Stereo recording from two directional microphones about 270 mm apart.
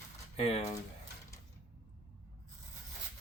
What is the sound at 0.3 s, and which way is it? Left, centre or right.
Speech, left.